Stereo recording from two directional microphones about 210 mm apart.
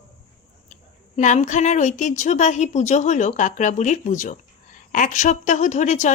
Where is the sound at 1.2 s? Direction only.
35° left (ahead or behind).